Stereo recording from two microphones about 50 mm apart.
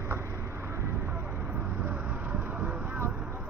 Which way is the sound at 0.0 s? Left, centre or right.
Right.